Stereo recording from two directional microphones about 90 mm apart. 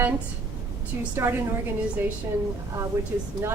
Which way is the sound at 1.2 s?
25° right (ahead or behind).